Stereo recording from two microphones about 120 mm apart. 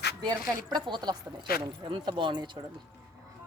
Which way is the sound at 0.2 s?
35° right (ahead or behind).